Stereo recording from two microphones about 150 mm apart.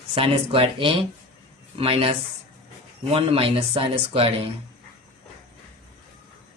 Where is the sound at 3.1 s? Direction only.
40° right (ahead or behind).